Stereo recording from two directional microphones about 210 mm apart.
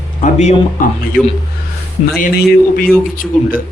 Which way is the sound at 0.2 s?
35° left (ahead or behind).